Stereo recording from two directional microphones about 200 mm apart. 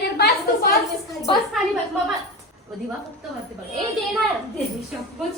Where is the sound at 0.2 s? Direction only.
50° left (ahead or behind).